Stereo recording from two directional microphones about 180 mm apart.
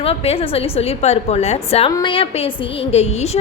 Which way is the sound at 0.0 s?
30° left (ahead or behind).